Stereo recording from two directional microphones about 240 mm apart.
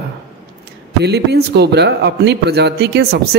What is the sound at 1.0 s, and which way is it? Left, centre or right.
A man's voice, right.